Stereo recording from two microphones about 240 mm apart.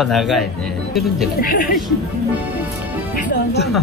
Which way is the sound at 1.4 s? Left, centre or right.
Left.